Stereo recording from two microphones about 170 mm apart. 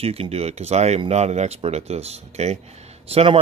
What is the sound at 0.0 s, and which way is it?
Speech, 35° right (ahead or behind).